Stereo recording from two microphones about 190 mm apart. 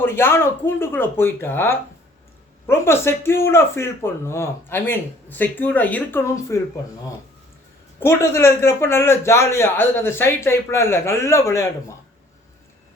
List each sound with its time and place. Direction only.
0.0 s a man's voice: 10° left (ahead or behind)
7.9 s a man's voice: 15° left (ahead or behind)